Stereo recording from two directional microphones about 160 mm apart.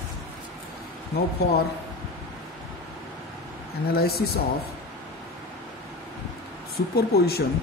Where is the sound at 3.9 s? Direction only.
80° left.